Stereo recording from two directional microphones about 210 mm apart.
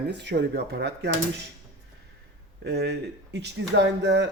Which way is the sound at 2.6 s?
50° right (ahead or behind).